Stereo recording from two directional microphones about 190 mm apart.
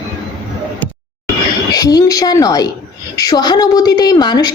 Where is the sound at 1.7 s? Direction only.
20° left (ahead or behind).